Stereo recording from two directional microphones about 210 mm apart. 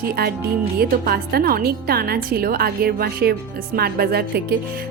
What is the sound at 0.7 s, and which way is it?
A woman's voice, 45° right (ahead or behind).